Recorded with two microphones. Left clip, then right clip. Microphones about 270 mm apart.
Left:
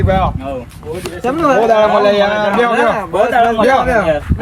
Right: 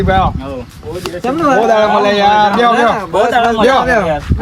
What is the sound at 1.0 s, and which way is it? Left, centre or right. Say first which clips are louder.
Speech: even; centre.